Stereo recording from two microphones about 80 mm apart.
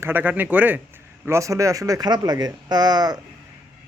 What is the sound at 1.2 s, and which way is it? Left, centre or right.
Speech, right.